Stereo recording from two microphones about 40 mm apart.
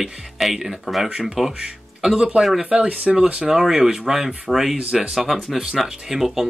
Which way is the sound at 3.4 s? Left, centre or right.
Centre.